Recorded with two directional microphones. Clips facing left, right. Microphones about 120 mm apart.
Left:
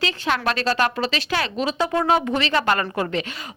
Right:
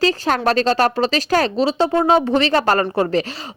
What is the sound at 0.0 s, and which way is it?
Speech, 40° right (ahead or behind).